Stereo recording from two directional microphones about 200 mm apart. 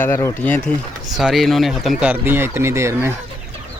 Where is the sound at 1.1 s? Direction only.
Centre (ahead or behind).